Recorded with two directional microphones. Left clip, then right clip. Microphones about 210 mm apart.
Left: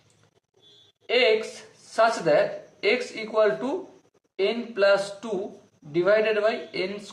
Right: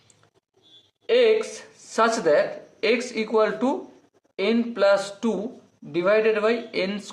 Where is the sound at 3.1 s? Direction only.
45° right (ahead or behind).